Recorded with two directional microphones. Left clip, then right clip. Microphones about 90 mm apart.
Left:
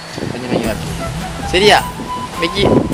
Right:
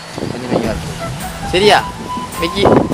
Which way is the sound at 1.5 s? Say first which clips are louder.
Even; 25° left (ahead or behind).